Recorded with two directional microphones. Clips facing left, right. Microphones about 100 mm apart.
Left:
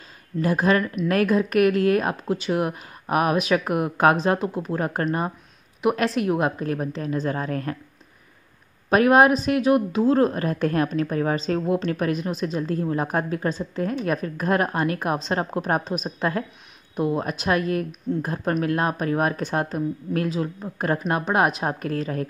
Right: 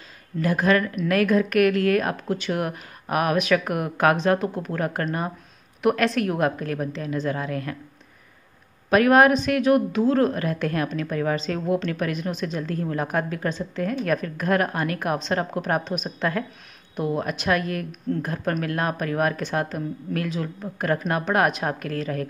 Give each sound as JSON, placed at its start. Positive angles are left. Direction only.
{"t": 0.4, "sound": "a woman's voice", "side_deg": 25}
{"t": 8.9, "sound": "a woman's voice", "side_deg": 25}